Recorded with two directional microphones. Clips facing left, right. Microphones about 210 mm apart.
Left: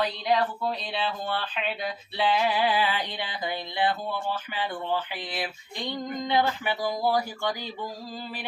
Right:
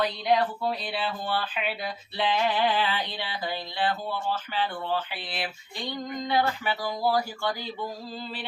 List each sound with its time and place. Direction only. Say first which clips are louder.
0.0 s speech: right 1 dB; centre (ahead or behind); by 4.9 s 15° left (ahead or behind)
6.2 s speech: left 1 dB; 20° left (ahead or behind)